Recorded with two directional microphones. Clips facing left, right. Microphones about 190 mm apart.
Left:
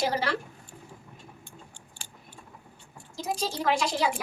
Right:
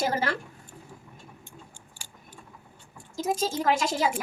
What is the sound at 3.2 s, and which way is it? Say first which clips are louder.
Speech: right 4 dB; 45° right (ahead or behind).